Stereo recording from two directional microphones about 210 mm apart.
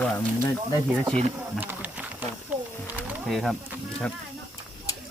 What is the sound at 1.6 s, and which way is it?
Speech, 10° right (ahead or behind).